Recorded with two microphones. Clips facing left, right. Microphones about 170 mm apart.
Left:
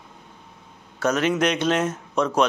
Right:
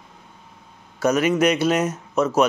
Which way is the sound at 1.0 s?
10° right (ahead or behind).